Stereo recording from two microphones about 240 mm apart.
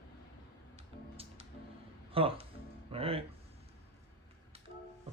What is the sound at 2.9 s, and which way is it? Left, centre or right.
Music, right.